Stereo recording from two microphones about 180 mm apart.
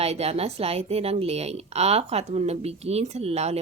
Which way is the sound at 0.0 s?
35° right (ahead or behind).